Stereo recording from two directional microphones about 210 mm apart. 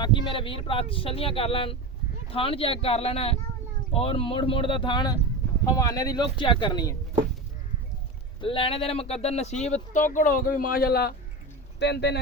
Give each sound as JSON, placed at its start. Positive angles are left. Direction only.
{"t": 0.0, "sound": "speech", "side_deg": 20}
{"t": 8.4, "sound": "speech", "side_deg": 25}